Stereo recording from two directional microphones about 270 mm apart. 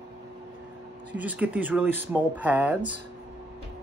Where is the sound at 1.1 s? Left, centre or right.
Centre.